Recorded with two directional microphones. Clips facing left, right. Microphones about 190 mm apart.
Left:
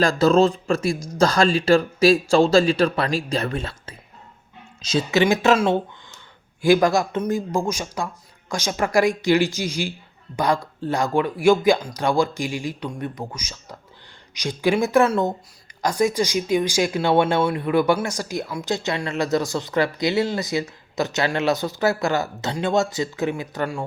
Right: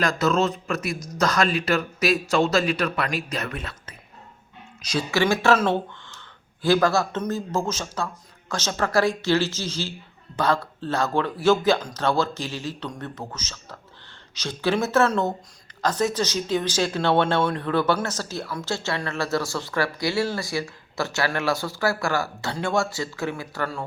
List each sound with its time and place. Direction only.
0.0 s speech: 30° left (ahead or behind)